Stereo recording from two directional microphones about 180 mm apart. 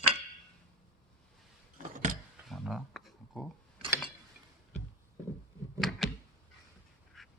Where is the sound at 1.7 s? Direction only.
45° right (ahead or behind).